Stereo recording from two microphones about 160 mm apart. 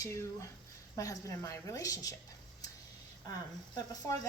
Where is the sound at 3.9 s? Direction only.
25° left (ahead or behind).